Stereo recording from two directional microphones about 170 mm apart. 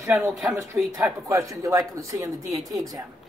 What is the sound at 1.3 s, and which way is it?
Speech, 20° right (ahead or behind).